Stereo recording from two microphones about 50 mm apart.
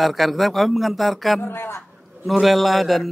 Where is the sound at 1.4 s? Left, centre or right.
Left.